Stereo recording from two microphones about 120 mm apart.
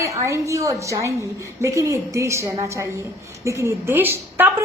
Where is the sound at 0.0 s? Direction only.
25° right (ahead or behind).